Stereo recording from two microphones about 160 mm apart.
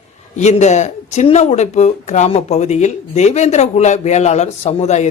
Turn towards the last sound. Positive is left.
turn(degrees=45)  # may be behind; listen again after turning